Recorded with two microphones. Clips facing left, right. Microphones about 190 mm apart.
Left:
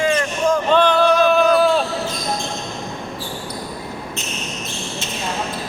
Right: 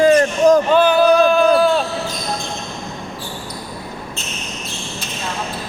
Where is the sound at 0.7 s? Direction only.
5° right (ahead or behind).